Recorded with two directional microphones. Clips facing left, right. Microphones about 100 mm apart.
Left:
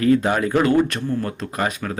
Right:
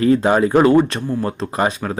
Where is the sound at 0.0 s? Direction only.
30° right (ahead or behind).